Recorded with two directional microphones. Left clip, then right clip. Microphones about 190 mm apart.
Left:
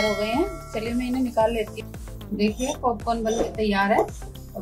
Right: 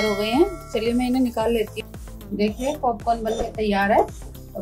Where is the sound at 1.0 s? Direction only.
50° right (ahead or behind).